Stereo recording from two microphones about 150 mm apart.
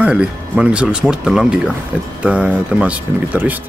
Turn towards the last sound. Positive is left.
turn(degrees=-5)  # may be behind; listen again after turning